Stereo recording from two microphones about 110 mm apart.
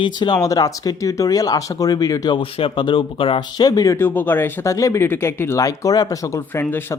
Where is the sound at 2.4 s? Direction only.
55° left (ahead or behind); by 4.0 s 35° left (ahead or behind).